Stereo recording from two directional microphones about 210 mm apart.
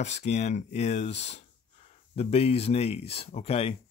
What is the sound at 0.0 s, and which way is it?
Speech, 35° left (ahead or behind).